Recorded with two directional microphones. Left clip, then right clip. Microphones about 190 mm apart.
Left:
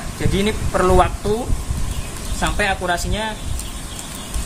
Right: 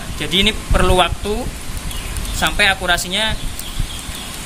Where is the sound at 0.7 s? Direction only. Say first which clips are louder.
Left 4 dB; 15° right (ahead or behind).